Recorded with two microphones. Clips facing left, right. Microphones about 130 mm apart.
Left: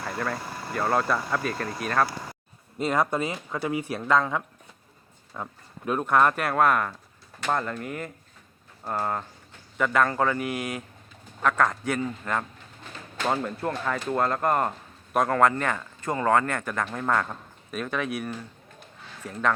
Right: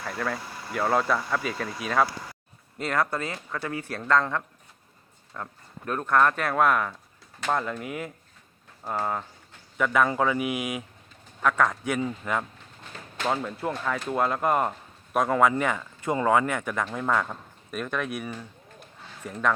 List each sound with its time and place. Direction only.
0.0 s a man's voice: 5° left (ahead or behind)
2.7 s a man's voice: 20° left (ahead or behind); by 19.5 s centre (ahead or behind)